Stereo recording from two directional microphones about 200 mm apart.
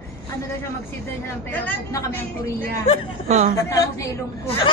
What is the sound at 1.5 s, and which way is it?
Speech, 10° left (ahead or behind).